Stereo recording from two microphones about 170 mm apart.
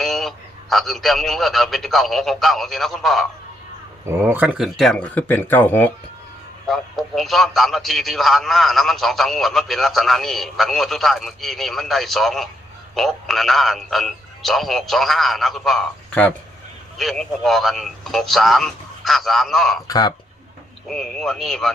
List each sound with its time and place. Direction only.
0.0 s a man's voice: centre (ahead or behind)
4.0 s a man's voice: 10° right (ahead or behind)
19.9 s speech: 20° left (ahead or behind)
20.8 s a man's voice: centre (ahead or behind)